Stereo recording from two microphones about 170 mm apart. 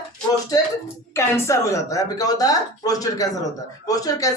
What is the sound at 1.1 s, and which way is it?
Speech, 15° left (ahead or behind).